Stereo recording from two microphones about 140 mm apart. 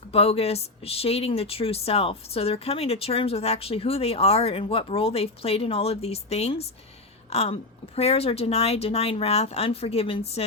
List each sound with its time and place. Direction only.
0.1 s speech: 45° left (ahead or behind)